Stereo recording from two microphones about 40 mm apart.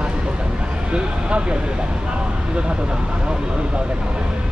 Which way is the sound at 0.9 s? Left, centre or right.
Right.